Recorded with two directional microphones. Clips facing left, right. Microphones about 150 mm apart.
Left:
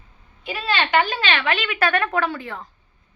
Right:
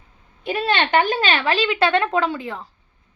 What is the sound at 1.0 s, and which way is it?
A woman's voice, 40° right (ahead or behind).